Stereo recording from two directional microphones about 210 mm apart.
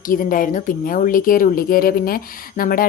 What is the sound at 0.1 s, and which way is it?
A woman's voice, 40° left (ahead or behind).